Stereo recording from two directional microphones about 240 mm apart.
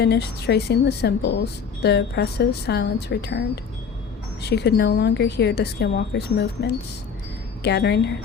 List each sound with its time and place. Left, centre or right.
0.0 s a woman's voice: left